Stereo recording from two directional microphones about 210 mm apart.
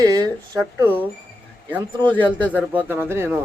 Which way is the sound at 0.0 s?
20° right (ahead or behind).